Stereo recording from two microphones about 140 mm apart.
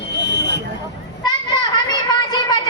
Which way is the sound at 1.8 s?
30° left (ahead or behind).